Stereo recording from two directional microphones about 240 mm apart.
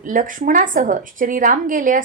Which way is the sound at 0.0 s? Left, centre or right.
Right.